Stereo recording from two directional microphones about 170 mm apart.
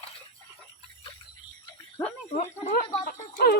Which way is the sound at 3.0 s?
70° left (ahead or behind).